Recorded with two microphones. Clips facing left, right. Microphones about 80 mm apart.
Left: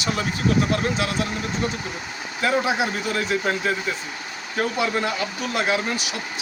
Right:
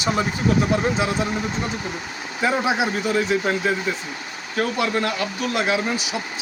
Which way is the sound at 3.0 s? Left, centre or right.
Centre.